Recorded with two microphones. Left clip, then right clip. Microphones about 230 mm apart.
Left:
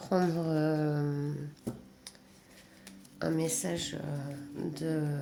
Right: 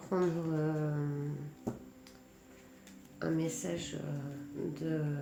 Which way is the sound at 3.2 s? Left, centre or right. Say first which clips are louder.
Left 3 dB; left.